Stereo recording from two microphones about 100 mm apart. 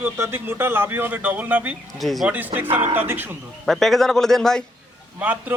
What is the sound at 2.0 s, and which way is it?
Speech, centre (ahead or behind).